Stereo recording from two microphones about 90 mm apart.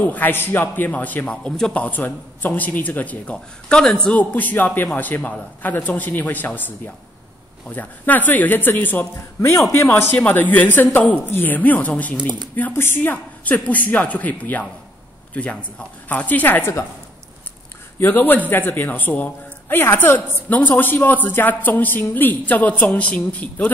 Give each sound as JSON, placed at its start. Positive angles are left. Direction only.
{"t": 0.0, "sound": "a man's voice", "side_deg": 20}
{"t": 7.7, "sound": "a man's voice", "side_deg": 20}
{"t": 17.9, "sound": "a man's voice", "side_deg": 20}